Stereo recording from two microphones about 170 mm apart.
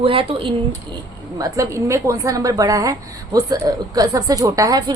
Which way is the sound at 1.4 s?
15° right (ahead or behind).